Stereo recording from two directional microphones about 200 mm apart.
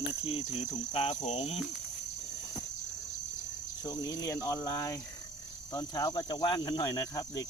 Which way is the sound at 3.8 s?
20° left (ahead or behind).